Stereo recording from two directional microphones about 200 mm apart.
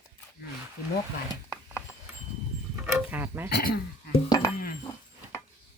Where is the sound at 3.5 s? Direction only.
50° left (ahead or behind).